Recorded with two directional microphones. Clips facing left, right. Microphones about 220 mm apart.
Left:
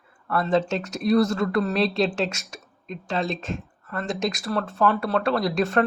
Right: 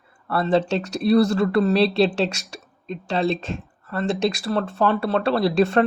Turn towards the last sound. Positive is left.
turn(degrees=-30)  # may be behind; listen again after turning